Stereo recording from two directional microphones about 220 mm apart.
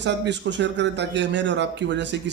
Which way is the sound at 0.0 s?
55° right (ahead or behind).